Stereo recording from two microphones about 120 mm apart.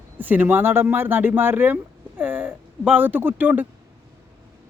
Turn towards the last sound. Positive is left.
turn(degrees=-15)  # may be behind; listen again after turning